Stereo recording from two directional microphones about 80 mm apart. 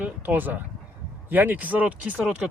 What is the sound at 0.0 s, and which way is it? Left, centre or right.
Speech, centre.